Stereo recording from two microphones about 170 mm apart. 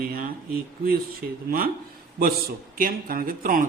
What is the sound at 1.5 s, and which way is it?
Speech, 60° right (ahead or behind).